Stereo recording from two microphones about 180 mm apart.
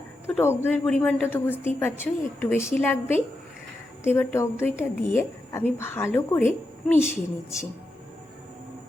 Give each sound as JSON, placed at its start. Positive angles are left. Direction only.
{"t": 0.3, "sound": "a woman's voice", "side_deg": 10}